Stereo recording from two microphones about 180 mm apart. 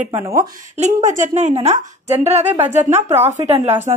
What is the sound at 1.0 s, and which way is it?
A woman's voice, 40° right (ahead or behind).